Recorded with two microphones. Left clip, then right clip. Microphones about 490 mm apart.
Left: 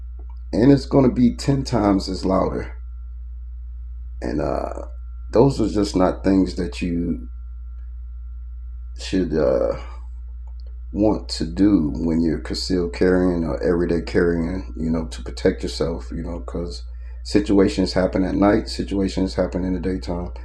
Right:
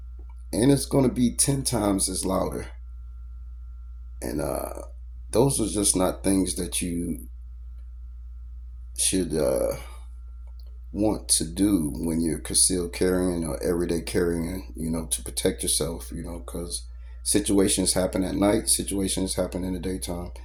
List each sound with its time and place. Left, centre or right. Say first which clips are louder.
0.5 s speech: left 6 dB; right
4.2 s speech: left 6 dB; right
9.0 s speech: left 4 dB; right